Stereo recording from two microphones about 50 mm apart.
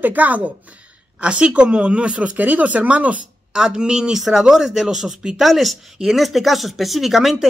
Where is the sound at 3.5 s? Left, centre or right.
Centre.